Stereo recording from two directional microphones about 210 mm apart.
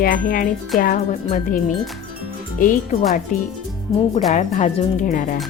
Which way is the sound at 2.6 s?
40° left (ahead or behind).